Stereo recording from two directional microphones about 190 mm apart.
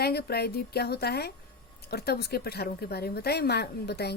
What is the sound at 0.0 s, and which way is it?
A woman's voice, 55° left (ahead or behind).